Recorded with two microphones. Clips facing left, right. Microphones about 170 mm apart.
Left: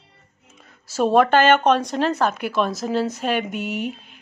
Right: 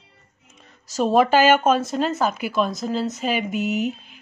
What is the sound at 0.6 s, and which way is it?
Speech, centre (ahead or behind).